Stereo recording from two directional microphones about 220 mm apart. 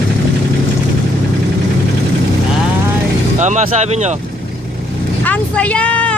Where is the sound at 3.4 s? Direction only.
30° right (ahead or behind).